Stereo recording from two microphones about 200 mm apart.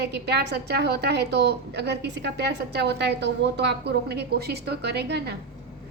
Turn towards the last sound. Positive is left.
turn(degrees=-55)  # may be behind; listen again after turning